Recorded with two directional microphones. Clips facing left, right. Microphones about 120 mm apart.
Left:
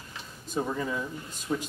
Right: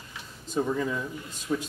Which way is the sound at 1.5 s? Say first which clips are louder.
Right 1 dB; 15° left (ahead or behind).